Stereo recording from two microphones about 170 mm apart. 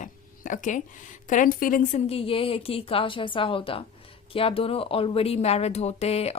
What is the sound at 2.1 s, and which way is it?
Speech, 35° left (ahead or behind).